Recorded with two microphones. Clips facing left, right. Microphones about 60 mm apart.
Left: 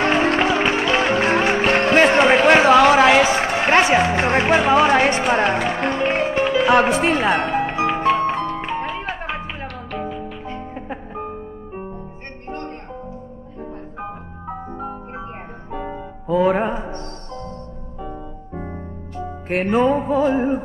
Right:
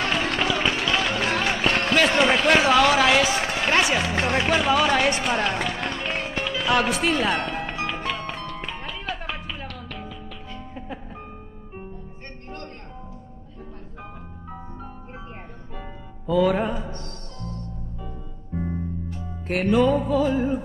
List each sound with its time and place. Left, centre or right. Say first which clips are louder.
0.0 s music: left 7 dB; left
13.9 s music: left 8 dB; left